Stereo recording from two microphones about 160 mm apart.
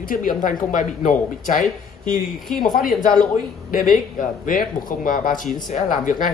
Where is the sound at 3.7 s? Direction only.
60° left (ahead or behind).